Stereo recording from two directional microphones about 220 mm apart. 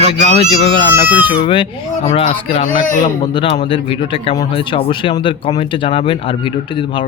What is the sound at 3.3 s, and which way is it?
Speech, 25° left (ahead or behind).